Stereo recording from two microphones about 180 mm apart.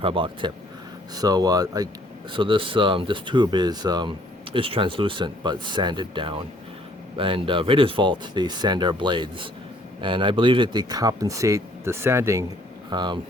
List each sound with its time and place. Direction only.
0.0 s speech: 30° right (ahead or behind)